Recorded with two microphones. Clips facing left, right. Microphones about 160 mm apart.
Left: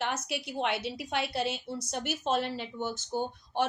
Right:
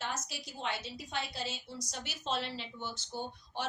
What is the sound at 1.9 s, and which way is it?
Speech, 55° left (ahead or behind).